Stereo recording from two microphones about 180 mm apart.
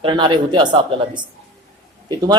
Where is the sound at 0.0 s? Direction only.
25° right (ahead or behind).